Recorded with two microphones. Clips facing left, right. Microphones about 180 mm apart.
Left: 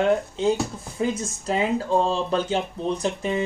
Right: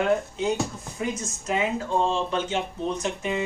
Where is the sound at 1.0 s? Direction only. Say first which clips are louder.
Left 5 dB; 30° left (ahead or behind).